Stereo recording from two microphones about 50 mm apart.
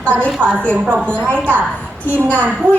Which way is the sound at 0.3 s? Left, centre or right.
Right.